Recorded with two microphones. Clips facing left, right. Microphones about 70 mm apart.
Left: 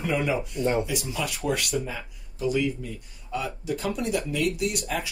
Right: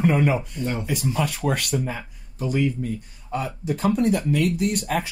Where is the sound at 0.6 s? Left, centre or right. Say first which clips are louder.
Left 3 dB; left.